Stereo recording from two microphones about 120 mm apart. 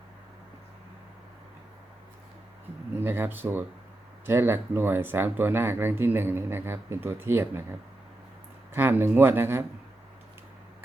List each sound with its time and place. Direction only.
2.9 s speech: 20° right (ahead or behind)
8.7 s speech: 15° right (ahead or behind)